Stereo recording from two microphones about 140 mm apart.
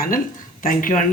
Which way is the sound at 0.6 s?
80° left.